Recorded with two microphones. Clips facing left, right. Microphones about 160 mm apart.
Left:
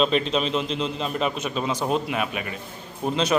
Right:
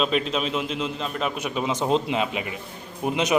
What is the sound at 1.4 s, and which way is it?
A man's voice, 15° right (ahead or behind).